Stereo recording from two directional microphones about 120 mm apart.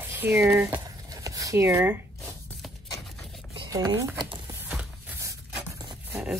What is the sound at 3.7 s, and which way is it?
Speech, 30° right (ahead or behind).